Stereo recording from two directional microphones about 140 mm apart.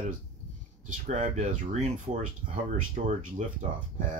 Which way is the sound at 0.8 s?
60° right (ahead or behind).